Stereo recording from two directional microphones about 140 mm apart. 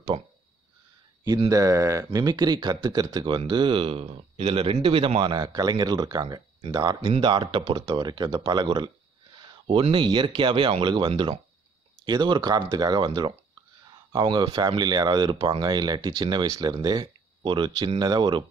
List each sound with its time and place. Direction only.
1.5 s speech: 20° right (ahead or behind)